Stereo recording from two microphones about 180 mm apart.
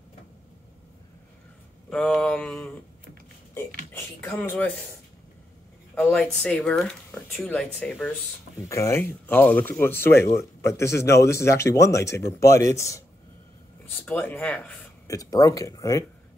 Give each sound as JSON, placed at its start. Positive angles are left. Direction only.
{"t": 1.9, "sound": "speech", "side_deg": 5}
{"t": 3.9, "sound": "speech", "side_deg": 10}
{"t": 5.9, "sound": "speech", "side_deg": 0}